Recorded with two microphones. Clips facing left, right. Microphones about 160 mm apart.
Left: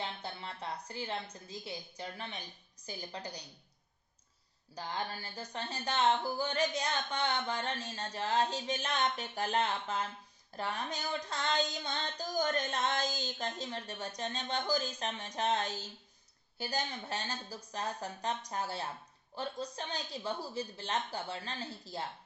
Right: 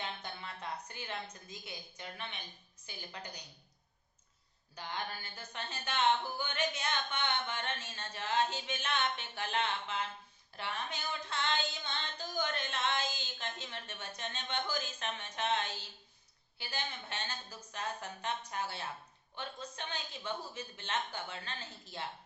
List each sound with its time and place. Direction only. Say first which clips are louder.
0.0 s a woman's voice: left 2 dB; 30° left (ahead or behind)
4.7 s speech: left 3 dB; 35° left (ahead or behind)